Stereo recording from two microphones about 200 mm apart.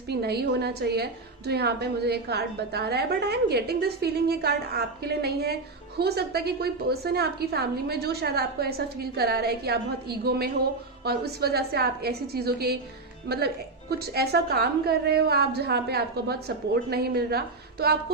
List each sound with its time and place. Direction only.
0.1 s a woman's voice: 55° right (ahead or behind)